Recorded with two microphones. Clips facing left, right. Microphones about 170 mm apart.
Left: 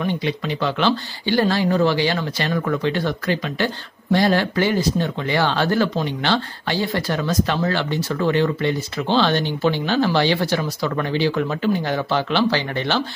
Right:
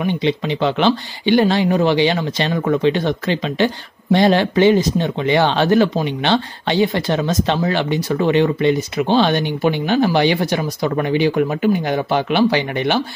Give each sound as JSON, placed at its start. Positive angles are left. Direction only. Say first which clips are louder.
{"t": 0.0, "sound": "speech", "louder": "right 4 dB", "side_deg": -20}